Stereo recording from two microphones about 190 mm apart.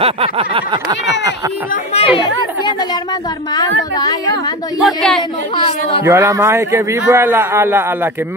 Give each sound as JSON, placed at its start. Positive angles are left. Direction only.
{"t": 0.0, "sound": "a sound", "side_deg": -30}
{"t": 2.0, "sound": "speech", "side_deg": 30}
{"t": 3.5, "sound": "a woman's voice", "side_deg": 20}
{"t": 4.8, "sound": "speech", "side_deg": 0}
{"t": 5.7, "sound": "a woman's voice", "side_deg": 30}
{"t": 6.0, "sound": "a man's voice", "side_deg": -15}